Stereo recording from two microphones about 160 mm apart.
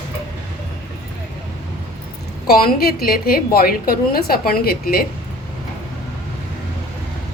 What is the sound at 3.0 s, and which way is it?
A woman's voice, 70° left (ahead or behind).